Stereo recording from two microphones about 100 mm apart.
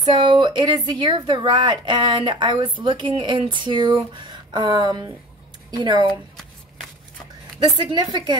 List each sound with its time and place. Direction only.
0.0 s speech: 55° right (ahead or behind)
7.6 s speech: 45° right (ahead or behind)